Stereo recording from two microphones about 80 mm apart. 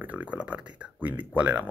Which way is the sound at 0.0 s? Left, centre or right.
Centre.